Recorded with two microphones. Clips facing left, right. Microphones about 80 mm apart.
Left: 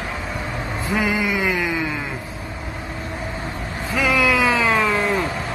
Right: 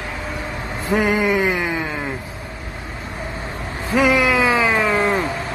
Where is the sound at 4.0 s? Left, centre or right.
Right.